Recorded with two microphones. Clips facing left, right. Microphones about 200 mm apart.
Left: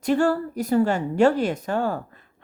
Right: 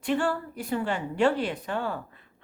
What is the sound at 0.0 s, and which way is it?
A woman's voice, 40° left (ahead or behind).